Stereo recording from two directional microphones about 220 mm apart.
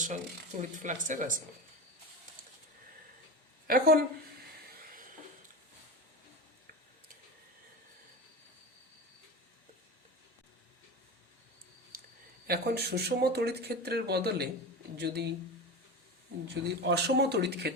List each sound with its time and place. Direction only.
0.0 s speech: 35° right (ahead or behind)
3.7 s speech: 45° right (ahead or behind)
4.8 s a sound: 40° right (ahead or behind)
11.9 s a sound: 40° right (ahead or behind)
12.5 s speech: 45° right (ahead or behind)
16.6 s speech: 50° right (ahead or behind)